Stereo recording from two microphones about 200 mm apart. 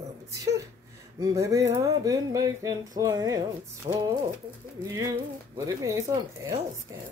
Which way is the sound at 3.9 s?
30° right (ahead or behind).